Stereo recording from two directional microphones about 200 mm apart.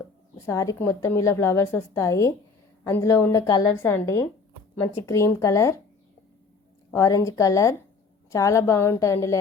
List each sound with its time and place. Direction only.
0.3 s a woman's voice: 15° left (ahead or behind)
6.9 s a woman's voice: 15° left (ahead or behind)